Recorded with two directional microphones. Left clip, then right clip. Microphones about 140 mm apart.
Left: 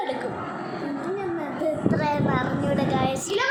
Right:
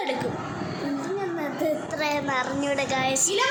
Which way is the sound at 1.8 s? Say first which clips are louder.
Left 2 dB; 20° right (ahead or behind).